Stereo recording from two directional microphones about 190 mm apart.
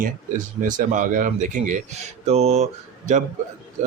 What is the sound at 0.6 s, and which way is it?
Speech, 40° right (ahead or behind).